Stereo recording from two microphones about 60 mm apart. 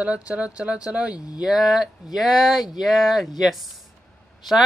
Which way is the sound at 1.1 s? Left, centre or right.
Left.